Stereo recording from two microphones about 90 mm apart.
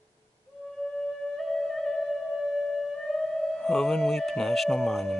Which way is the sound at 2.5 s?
Centre (ahead or behind).